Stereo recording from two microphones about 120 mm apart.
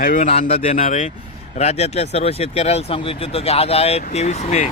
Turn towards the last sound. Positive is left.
turn(degrees=65)  # may be behind; listen again after turning